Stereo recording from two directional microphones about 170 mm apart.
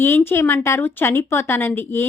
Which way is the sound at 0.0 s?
15° left (ahead or behind).